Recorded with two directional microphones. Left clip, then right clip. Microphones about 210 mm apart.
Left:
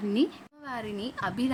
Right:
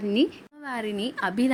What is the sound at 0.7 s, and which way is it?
Speech, 20° right (ahead or behind).